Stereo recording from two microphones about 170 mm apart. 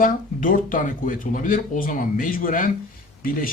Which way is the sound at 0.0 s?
50° left (ahead or behind).